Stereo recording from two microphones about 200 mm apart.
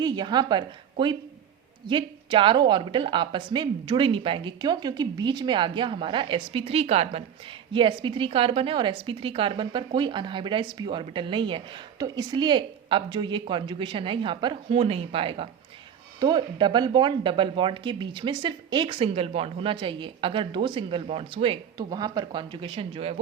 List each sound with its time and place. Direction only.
0.0 s a woman's voice: 20° right (ahead or behind)